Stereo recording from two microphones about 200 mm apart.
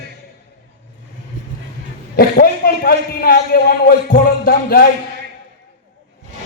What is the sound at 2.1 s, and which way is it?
A man's voice, 50° left (ahead or behind).